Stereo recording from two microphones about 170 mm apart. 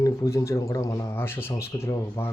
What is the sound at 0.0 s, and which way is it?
Speech, 20° left (ahead or behind).